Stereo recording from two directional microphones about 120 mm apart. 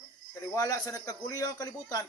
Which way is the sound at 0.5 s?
30° left (ahead or behind).